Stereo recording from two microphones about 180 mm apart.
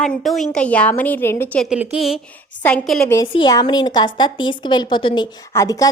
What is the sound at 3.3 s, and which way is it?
A woman's voice, 25° left (ahead or behind).